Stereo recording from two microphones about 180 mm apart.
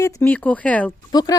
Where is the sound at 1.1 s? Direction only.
20° left (ahead or behind).